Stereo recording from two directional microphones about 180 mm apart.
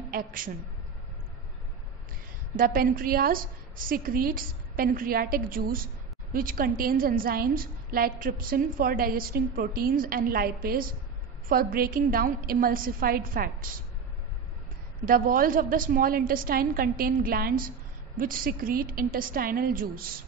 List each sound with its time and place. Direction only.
0.1 s a woman's voice: 50° right (ahead or behind)
2.5 s a woman's voice: 50° right (ahead or behind)
15.0 s a woman's voice: 50° right (ahead or behind)